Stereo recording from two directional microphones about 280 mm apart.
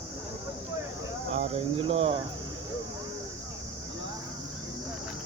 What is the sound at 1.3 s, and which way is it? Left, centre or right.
Speech, right.